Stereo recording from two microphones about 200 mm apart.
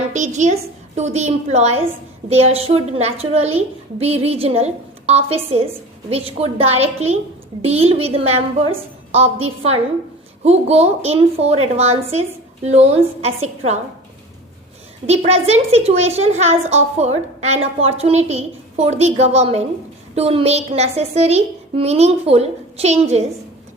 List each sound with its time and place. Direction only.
0.1 s a woman's voice: 35° right (ahead or behind)
15.0 s a woman's voice: 30° right (ahead or behind)